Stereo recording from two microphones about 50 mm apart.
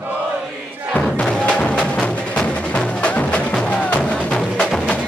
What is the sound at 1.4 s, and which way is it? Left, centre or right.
Music, left.